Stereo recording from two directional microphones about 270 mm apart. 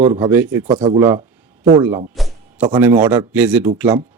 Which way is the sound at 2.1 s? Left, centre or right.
Centre.